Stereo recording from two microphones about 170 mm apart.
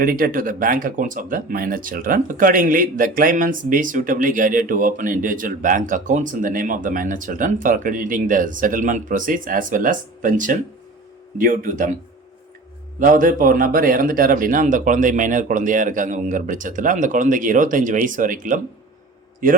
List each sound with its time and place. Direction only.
0.0 s speech: 55° right (ahead or behind)
13.0 s speech: 50° right (ahead or behind)